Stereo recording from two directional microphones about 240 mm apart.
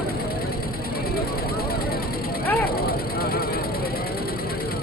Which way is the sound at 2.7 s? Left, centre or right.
Left.